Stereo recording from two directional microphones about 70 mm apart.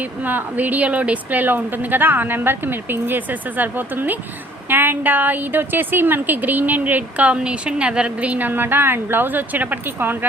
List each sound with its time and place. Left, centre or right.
0.3 s a woman's voice: right